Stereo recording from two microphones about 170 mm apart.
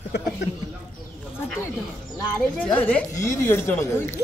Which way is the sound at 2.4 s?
10° left (ahead or behind).